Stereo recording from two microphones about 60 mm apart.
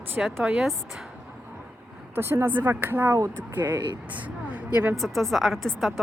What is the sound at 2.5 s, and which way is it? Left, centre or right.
Speech, right.